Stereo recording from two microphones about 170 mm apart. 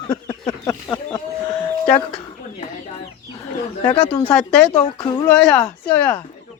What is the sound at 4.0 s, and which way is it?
Speech, 25° left (ahead or behind).